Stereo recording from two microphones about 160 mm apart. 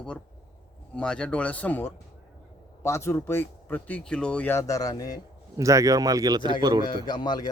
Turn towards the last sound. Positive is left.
turn(degrees=25)  # may be behind; listen again after turning